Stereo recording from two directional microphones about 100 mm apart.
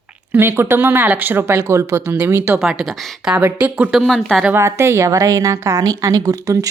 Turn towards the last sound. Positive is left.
turn(degrees=-35)  # may be behind; listen again after turning